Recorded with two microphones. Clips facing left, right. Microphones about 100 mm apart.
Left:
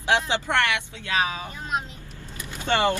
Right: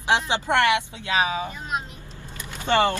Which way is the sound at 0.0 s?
20° right (ahead or behind).